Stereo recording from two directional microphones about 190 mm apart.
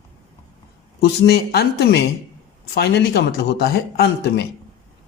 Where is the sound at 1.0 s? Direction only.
60° left (ahead or behind).